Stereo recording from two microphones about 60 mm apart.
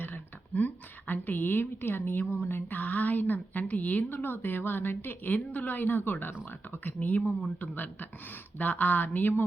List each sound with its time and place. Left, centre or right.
0.0 s a woman's voice: left
8.5 s a woman's voice: left